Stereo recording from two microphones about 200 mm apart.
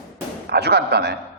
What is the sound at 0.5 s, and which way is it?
Speech, 55° right (ahead or behind).